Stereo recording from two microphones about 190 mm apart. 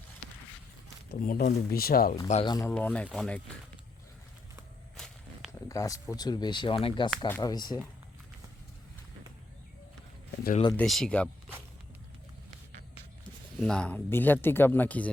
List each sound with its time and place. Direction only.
1.1 s speech: 50° left (ahead or behind)
2.2 s speech: 35° left (ahead or behind)
2.5 s speech: 15° left (ahead or behind)
4.9 s walk: centre (ahead or behind)
5.5 s speech: 15° left (ahead or behind)
7.3 s speech: 10° left (ahead or behind)
7.5 s speech: 20° left (ahead or behind)
10.8 s speech: centre (ahead or behind)
13.6 s speech: 5° left (ahead or behind)